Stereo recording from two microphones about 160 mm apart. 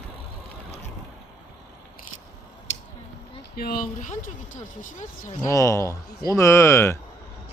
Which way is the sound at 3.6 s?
65° left (ahead or behind).